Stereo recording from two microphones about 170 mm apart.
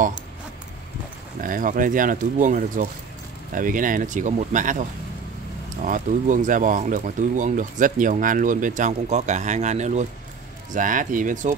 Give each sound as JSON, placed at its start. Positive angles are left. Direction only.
{"t": 1.4, "sound": "speech", "side_deg": -50}
{"t": 5.9, "sound": "speech", "side_deg": -50}